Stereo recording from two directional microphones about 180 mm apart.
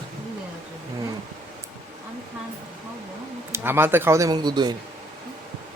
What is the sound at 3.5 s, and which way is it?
A man's voice, 10° right (ahead or behind).